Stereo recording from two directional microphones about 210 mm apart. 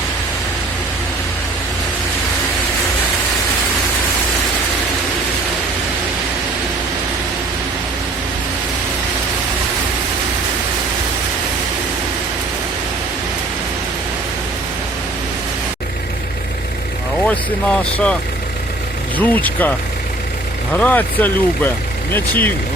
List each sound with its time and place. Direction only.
17.2 s speech: 5° left (ahead or behind)
20.7 s speech: 5° left (ahead or behind)